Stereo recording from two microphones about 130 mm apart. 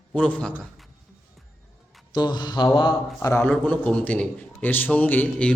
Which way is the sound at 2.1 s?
35° left (ahead or behind).